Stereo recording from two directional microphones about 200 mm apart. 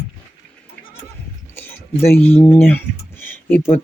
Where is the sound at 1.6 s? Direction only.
10° left (ahead or behind).